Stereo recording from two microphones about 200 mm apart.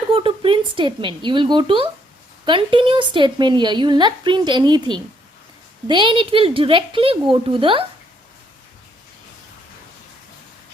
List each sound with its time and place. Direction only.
0.1 s a woman's voice: 25° right (ahead or behind)